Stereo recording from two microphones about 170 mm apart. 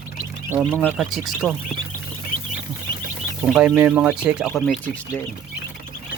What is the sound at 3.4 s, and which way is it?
Speech, 5° right (ahead or behind).